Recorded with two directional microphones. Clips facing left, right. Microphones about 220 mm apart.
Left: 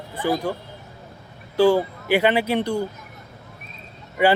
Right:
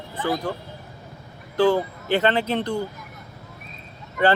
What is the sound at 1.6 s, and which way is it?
Speech, 10° left (ahead or behind).